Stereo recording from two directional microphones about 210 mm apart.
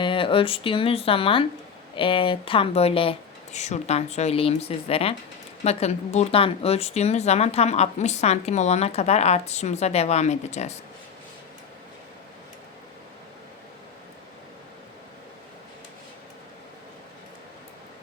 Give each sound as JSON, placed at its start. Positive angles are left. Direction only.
{"t": 0.0, "sound": "speech", "side_deg": 25}